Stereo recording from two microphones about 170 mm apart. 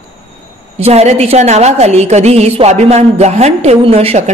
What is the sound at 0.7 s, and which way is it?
A woman's voice, 40° right (ahead or behind).